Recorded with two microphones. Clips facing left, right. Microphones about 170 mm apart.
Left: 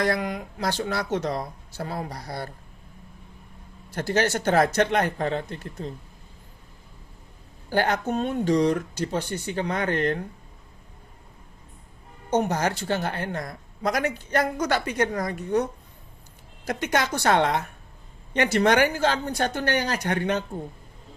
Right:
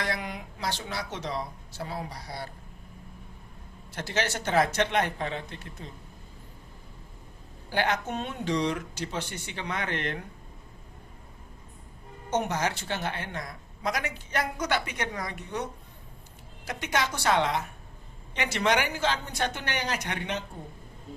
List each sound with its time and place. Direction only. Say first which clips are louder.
0.0 s speech: left 8 dB; 45° left (ahead or behind)
3.9 s speech: left 7 dB; 45° left (ahead or behind)
7.7 s speech: left 5 dB; 40° left (ahead or behind)
12.3 s speech: left 5 dB; 40° left (ahead or behind)
16.6 s speech: left 5 dB; 50° left (ahead or behind)
18.9 s speech: left 5 dB; 40° left (ahead or behind)